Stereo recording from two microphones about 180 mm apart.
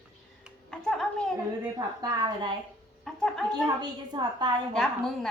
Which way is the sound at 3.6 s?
25° right (ahead or behind).